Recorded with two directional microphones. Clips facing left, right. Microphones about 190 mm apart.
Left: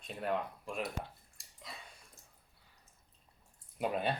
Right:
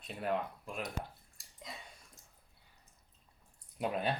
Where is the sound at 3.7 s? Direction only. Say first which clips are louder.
Left 1 dB; centre (ahead or behind).